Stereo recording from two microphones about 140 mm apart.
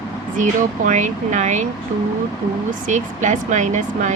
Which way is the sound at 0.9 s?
60° right (ahead or behind).